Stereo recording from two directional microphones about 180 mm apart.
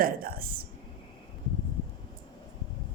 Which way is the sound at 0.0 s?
55° right (ahead or behind).